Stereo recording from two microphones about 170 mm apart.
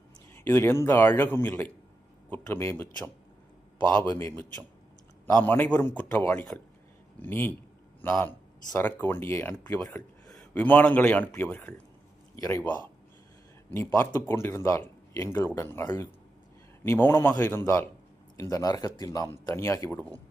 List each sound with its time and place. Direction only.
0.3 s speech: 15° left (ahead or behind)
13.7 s speech: 15° left (ahead or behind)